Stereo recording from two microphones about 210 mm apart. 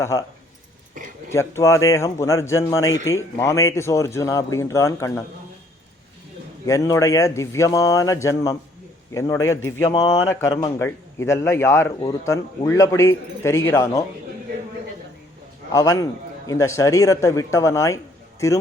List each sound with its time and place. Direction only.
0.0 s speech: 15° left (ahead or behind)
1.3 s speech: 15° left (ahead or behind)
6.7 s speech: 15° left (ahead or behind)
15.7 s speech: 15° left (ahead or behind)